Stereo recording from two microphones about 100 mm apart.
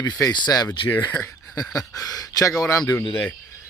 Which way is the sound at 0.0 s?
40° left (ahead or behind).